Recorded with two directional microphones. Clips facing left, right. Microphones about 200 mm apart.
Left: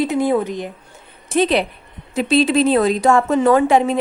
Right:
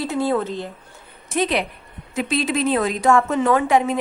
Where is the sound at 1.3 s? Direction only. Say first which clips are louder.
Left 5 dB; 30° left (ahead or behind).